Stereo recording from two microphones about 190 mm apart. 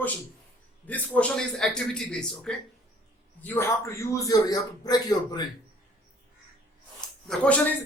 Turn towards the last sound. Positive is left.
turn(degrees=5)  # may be behind; listen again after turning